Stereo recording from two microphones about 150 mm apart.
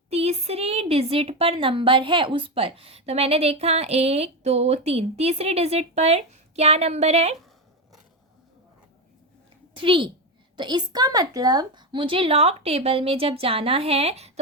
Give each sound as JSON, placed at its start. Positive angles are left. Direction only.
{"t": 0.1, "sound": "a woman's voice", "side_deg": -45}
{"t": 9.7, "sound": "a woman's voice", "side_deg": -35}